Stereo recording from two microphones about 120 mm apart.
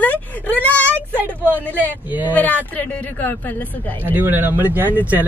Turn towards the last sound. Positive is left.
turn(degrees=-15)  # may be behind; listen again after turning